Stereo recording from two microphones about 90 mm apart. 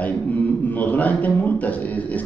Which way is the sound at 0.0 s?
20° left (ahead or behind).